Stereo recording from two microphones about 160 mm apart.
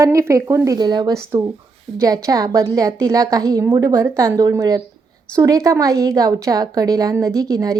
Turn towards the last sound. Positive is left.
turn(degrees=-20)  # may be behind; listen again after turning